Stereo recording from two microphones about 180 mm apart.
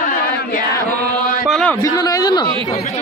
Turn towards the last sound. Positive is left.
turn(degrees=25)  # may be behind; listen again after turning